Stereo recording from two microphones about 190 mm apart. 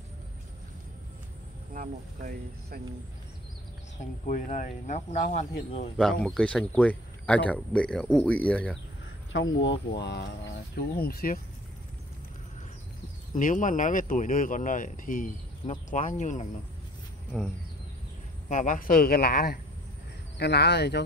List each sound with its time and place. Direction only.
1.7 s speech: 45° right (ahead or behind)
4.0 s speech: 40° left (ahead or behind)
5.9 s speech: centre (ahead or behind)
9.6 s speech: 70° left (ahead or behind); by 11.3 s 55° left (ahead or behind)
13.3 s speech: 45° left (ahead or behind)
18.5 s speech: 40° left (ahead or behind); by 21.0 s 60° left (ahead or behind)